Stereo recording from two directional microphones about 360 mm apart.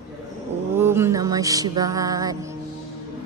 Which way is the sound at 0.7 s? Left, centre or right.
Centre.